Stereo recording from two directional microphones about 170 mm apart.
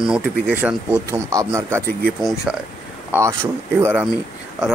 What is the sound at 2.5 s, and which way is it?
Speech, 5° right (ahead or behind).